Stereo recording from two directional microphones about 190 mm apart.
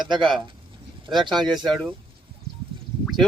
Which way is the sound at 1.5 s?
Centre (ahead or behind).